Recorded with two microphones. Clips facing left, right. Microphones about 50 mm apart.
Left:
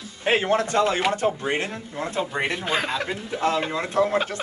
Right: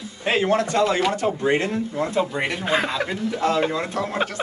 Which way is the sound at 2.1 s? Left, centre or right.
Centre.